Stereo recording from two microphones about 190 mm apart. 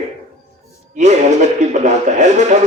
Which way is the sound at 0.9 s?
40° right (ahead or behind).